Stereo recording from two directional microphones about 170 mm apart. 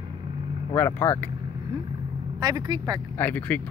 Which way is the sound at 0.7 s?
15° left (ahead or behind).